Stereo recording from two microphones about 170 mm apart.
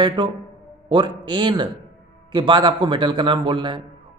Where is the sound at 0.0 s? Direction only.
25° right (ahead or behind).